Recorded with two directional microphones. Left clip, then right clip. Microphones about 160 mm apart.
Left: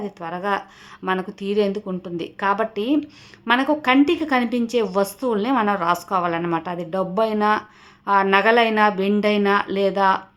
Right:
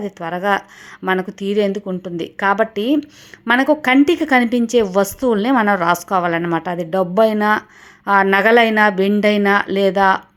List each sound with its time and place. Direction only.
0.0 s a woman's voice: 30° right (ahead or behind)